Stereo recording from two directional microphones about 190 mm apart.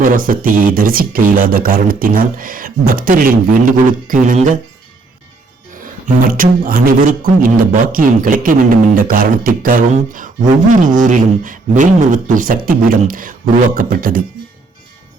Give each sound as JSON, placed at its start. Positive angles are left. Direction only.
{"t": 0.0, "sound": "speech", "side_deg": -45}
{"t": 6.2, "sound": "speech", "side_deg": -45}